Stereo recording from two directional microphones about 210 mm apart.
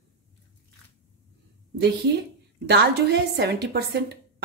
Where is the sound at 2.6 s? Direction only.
55° right (ahead or behind).